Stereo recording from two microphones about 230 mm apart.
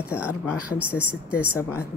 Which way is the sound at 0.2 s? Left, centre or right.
Centre.